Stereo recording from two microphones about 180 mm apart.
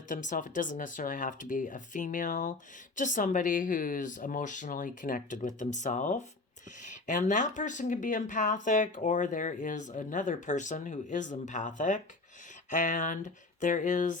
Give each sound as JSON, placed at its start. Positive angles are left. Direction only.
{"t": 0.1, "sound": "speech", "side_deg": 45}